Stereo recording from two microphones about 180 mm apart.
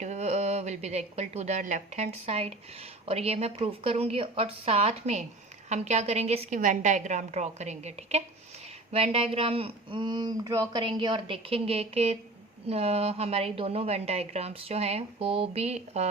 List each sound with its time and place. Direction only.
0.0 s a woman's voice: 40° right (ahead or behind)